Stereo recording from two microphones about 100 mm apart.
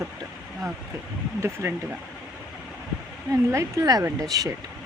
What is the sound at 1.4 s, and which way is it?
Speech, 30° right (ahead or behind).